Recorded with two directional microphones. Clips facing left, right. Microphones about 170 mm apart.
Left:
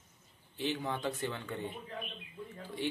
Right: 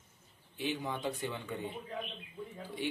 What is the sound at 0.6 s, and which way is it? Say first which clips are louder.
Speech: left 1 dB; 15° right (ahead or behind).